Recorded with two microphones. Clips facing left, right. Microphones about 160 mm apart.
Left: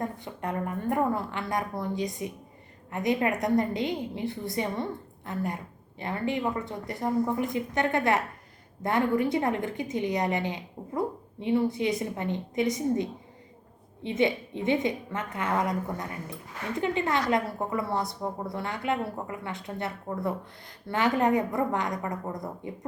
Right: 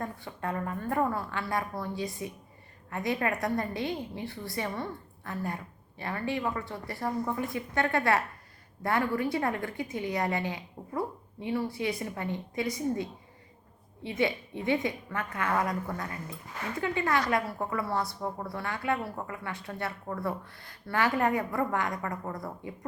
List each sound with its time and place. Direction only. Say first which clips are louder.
0.0 s a woman's voice: left 2 dB; 20° left (ahead or behind)